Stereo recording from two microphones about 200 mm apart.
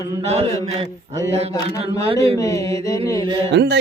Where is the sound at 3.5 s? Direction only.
60° right (ahead or behind).